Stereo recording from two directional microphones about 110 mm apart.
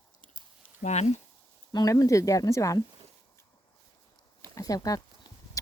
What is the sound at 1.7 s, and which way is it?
Speech, 30° left (ahead or behind).